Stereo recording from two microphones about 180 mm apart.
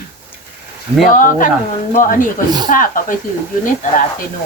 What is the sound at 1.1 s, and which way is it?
Speech, 50° left (ahead or behind).